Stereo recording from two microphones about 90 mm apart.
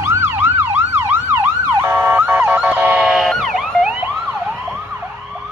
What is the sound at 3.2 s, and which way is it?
Emergency vehicle, centre (ahead or behind).